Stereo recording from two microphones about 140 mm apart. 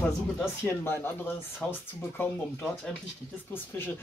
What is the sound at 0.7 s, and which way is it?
A man's voice, 15° left (ahead or behind).